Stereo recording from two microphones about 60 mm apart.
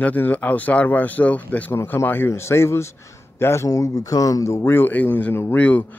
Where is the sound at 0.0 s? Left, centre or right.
Left.